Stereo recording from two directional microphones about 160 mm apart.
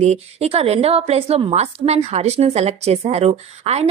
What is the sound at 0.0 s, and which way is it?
A woman's voice, 40° right (ahead or behind).